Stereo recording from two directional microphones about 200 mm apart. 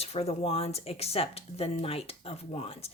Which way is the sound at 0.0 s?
30° left (ahead or behind).